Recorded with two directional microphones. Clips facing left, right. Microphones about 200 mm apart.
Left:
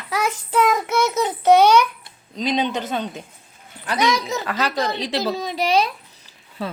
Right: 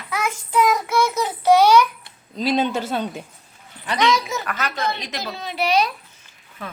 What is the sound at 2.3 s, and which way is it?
Speech, 5° right (ahead or behind).